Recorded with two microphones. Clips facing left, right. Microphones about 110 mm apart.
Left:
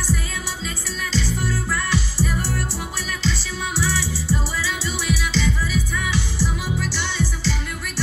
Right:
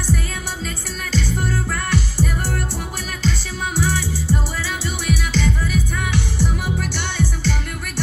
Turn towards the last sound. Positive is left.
turn(degrees=-55)  # may be behind; listen again after turning